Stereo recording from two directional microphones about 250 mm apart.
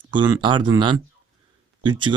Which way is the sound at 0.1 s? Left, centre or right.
Centre.